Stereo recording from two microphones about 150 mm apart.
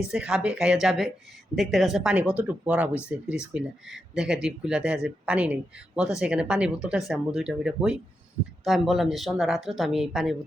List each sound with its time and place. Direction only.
0.1 s speech: 5° right (ahead or behind)